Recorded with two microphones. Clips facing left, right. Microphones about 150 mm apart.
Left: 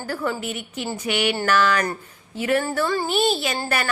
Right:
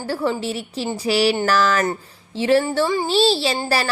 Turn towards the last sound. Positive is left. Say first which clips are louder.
# right 4 dB
turn(degrees=-30)  # may be behind; listen again after turning